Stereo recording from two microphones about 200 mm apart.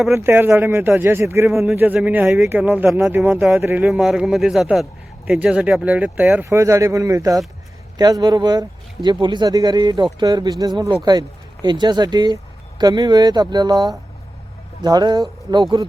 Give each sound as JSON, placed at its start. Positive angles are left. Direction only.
{"t": 0.1, "sound": "a man's voice", "side_deg": -10}